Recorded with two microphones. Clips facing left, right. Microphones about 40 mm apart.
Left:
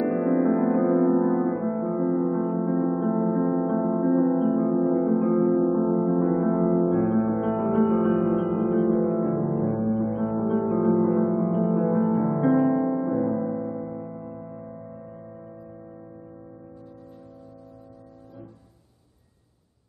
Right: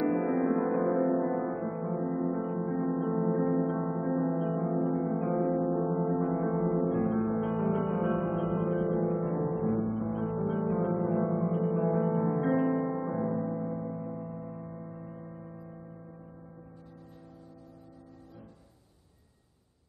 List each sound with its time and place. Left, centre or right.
0.0 s music: centre
6.2 s music: left; by 15.5 s centre